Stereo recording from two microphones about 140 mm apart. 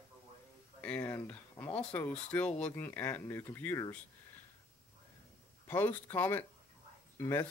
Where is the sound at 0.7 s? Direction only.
10° left (ahead or behind).